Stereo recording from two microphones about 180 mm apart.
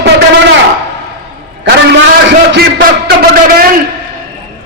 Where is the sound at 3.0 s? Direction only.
55° right (ahead or behind).